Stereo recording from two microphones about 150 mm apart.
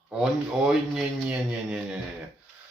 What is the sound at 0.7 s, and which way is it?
Speech, 5° right (ahead or behind).